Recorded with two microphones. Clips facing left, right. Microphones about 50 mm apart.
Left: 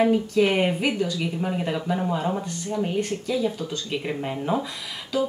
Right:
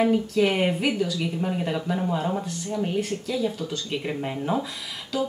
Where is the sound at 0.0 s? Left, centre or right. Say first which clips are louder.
Left 1 dB; centre.